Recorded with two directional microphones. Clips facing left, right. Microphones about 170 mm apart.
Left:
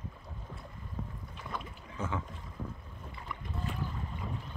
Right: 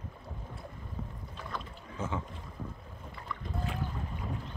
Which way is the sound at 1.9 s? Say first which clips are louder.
Right 1 dB; 25° right (ahead or behind).